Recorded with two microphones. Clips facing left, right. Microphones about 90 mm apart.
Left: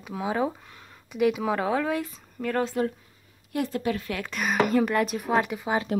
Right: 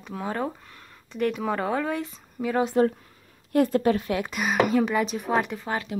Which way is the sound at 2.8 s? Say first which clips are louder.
Right 6 dB; 35° right (ahead or behind).